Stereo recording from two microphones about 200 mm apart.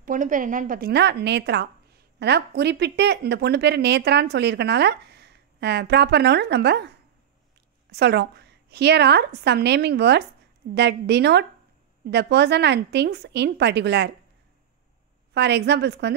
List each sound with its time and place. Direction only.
0.0 s a woman's voice: 40° right (ahead or behind); by 6.9 s 60° right (ahead or behind)
7.9 s speech: 55° right (ahead or behind)
15.3 s speech: 60° right (ahead or behind)